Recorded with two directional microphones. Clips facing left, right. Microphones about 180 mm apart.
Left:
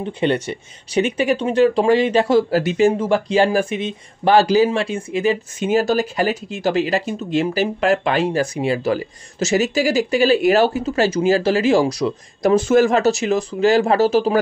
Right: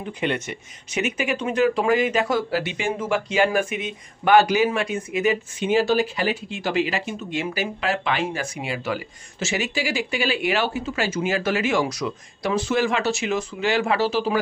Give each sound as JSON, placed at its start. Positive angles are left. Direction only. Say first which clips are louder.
{"t": 0.0, "sound": "speech", "louder": "left 6 dB", "side_deg": 30}
{"t": 5.6, "sound": "speech", "louder": "left 2 dB", "side_deg": 45}
{"t": 12.5, "sound": "speech", "louder": "left 7 dB", "side_deg": 45}